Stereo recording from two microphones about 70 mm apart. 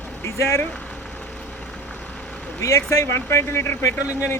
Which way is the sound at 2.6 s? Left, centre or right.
Left.